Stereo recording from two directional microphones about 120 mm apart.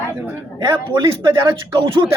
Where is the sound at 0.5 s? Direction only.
35° right (ahead or behind).